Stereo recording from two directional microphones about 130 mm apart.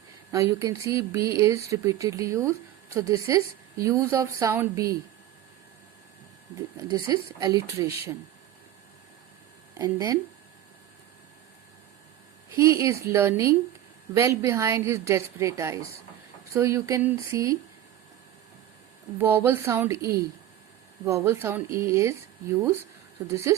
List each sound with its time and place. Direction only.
0.3 s speech: 25° right (ahead or behind)
6.7 s speech: 30° right (ahead or behind)
9.7 s speech: 25° right (ahead or behind)
12.5 s speech: 25° right (ahead or behind)
19.2 s a woman's voice: 15° right (ahead or behind)
21.0 s a woman's voice: 20° right (ahead or behind)